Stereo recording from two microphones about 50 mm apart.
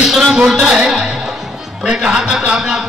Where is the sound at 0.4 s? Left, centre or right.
Centre.